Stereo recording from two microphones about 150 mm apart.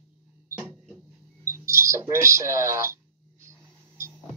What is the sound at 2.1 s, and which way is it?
Speech, 20° right (ahead or behind).